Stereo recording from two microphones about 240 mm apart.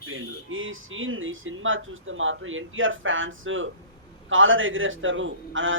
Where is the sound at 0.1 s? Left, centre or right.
Right.